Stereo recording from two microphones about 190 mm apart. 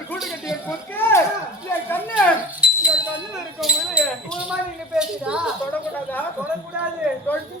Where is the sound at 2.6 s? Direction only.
5° right (ahead or behind).